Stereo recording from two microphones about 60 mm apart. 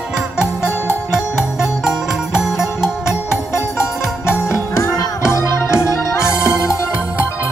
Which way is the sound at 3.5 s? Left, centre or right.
Left.